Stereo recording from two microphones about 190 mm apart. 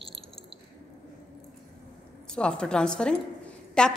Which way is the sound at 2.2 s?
5° left (ahead or behind).